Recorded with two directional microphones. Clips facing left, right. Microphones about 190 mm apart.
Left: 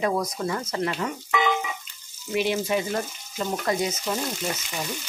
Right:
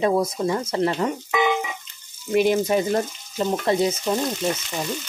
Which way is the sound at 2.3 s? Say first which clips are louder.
Right 6 dB; 45° right (ahead or behind).